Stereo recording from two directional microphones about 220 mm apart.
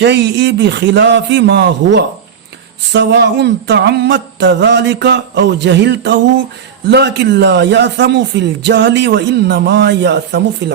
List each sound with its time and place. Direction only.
0.0 s speech: 55° right (ahead or behind)